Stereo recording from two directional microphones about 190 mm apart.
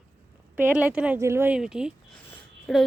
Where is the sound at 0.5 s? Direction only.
10° right (ahead or behind).